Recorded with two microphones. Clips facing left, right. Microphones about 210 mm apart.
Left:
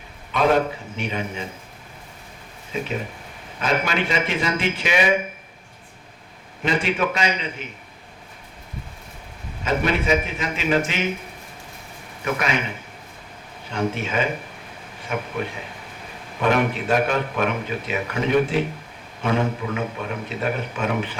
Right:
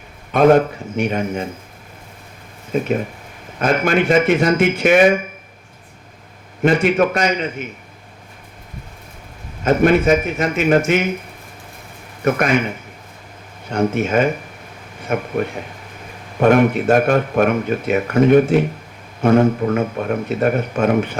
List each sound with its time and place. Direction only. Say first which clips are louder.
0.3 s speech: right 7 dB; 50° right (ahead or behind)
2.7 s speech: right 8 dB; 45° right (ahead or behind)
6.6 s speech: right 8 dB; 50° right (ahead or behind)
9.6 s speech: right 8 dB; 50° right (ahead or behind)
12.2 s speech: right 8 dB; 50° right (ahead or behind)
13.7 s speech: right 7 dB; 45° right (ahead or behind)